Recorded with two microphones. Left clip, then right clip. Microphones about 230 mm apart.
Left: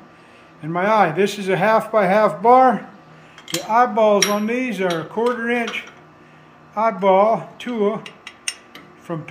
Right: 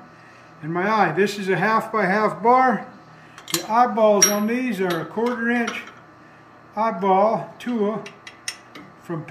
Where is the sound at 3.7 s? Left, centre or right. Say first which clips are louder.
Left 2 dB; centre.